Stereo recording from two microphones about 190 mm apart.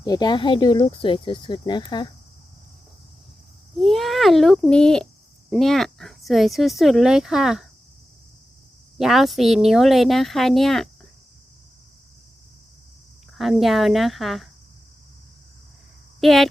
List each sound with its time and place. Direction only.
0.0 s speech: 20° left (ahead or behind)
3.8 s speech: centre (ahead or behind)
9.0 s speech: centre (ahead or behind)
13.3 s speech: centre (ahead or behind)
16.2 s speech: centre (ahead or behind)